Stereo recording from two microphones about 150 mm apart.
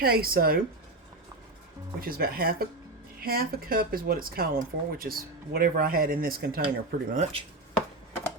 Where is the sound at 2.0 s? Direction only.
85° right.